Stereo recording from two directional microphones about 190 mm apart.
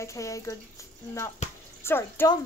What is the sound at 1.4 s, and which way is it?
Bathtub, 35° left (ahead or behind).